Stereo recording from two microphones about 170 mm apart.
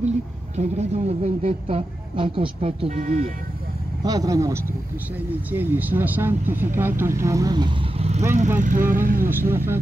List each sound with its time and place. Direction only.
0.6 s a woman's voice: 40° right (ahead or behind)
4.0 s speech: 20° right (ahead or behind)
8.5 s speech: 50° right (ahead or behind)
9.3 s speech: 15° right (ahead or behind)